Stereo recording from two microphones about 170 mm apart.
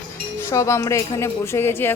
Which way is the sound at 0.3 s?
15° left (ahead or behind).